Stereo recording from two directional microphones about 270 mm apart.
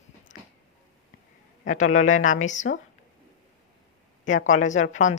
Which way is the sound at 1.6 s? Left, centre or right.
Left.